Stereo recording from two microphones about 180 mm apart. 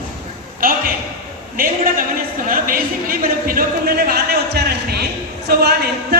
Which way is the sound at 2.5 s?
50° right (ahead or behind).